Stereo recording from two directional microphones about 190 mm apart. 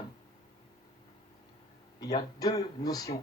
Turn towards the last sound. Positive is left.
turn(degrees=20)  # may be behind; listen again after turning